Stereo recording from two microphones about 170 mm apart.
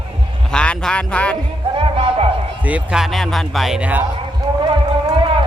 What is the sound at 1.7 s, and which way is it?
Music, 30° right (ahead or behind).